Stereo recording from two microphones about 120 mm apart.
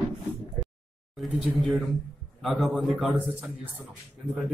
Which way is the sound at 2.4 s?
Centre (ahead or behind).